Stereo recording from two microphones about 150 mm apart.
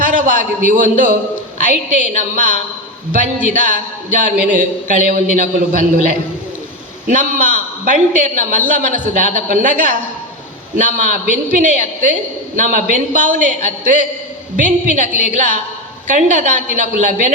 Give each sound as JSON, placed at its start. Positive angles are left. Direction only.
{"t": 0.0, "sound": "a man's voice", "side_deg": -60}